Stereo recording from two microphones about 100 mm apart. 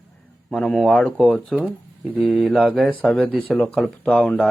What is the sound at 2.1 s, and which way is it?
Speech, centre (ahead or behind).